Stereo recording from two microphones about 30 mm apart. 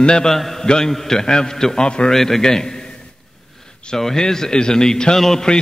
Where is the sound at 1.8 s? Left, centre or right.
Left.